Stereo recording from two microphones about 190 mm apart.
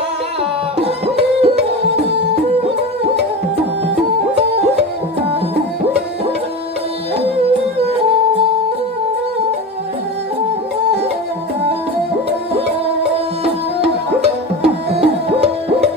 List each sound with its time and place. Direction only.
0.7 s music: 30° right (ahead or behind)
12.3 s music: 30° right (ahead or behind)